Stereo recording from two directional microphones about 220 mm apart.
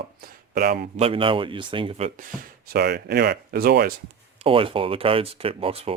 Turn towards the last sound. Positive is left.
turn(degrees=-25)  # may be behind; listen again after turning